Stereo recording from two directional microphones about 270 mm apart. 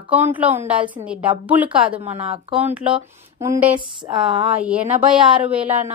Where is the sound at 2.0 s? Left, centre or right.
Right.